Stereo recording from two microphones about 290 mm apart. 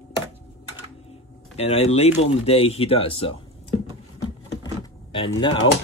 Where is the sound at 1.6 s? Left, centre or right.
Left.